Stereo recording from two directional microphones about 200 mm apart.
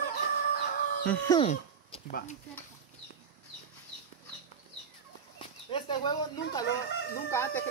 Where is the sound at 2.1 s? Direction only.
50° left (ahead or behind).